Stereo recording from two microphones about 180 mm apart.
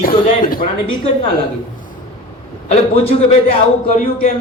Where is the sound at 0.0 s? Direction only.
50° left (ahead or behind).